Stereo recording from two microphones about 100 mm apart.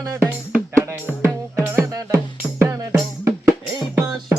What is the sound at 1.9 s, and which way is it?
Music, 35° right (ahead or behind).